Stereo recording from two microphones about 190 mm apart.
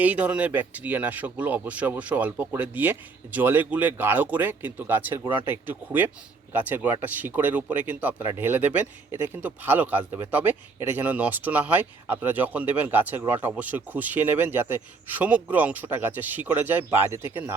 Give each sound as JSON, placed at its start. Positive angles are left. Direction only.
{"t": 0.0, "sound": "speech", "side_deg": -5}